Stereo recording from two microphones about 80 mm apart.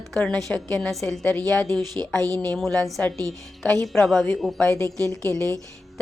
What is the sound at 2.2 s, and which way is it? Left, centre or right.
Speech, right.